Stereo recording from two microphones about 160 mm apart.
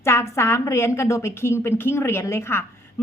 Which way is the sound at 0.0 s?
15° left (ahead or behind).